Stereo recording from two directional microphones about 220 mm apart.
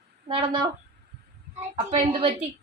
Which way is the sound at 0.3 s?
20° right (ahead or behind).